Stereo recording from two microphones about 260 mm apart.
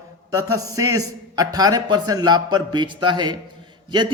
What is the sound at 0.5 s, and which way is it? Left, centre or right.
A man's voice, centre.